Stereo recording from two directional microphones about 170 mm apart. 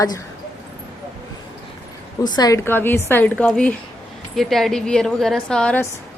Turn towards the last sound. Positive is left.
turn(degrees=5)  # may be behind; listen again after turning